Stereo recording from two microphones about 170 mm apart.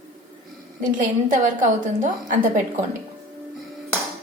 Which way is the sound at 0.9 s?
50° right (ahead or behind).